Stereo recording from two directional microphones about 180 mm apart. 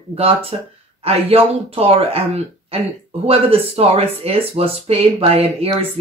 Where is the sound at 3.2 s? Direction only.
35° right (ahead or behind).